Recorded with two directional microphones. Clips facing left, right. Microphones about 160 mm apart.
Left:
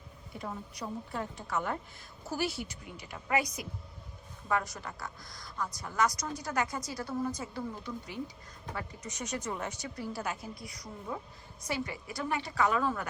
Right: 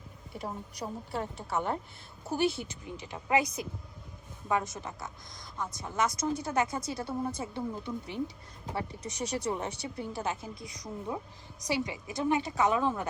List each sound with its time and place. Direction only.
1.5 s a woman's voice: 30° right (ahead or behind)